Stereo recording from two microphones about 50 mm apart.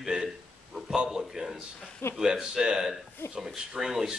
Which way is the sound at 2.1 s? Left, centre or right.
Centre.